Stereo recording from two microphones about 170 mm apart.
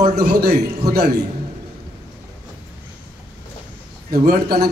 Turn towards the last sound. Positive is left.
turn(degrees=-65)  # may be behind; listen again after turning